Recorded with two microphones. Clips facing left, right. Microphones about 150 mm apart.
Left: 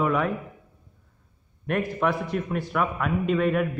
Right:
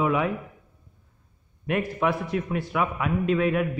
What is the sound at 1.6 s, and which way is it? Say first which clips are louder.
A man's voice: even; centre (ahead or behind).